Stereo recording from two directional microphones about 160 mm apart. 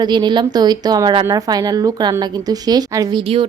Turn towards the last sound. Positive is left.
turn(degrees=-25)  # may be behind; listen again after turning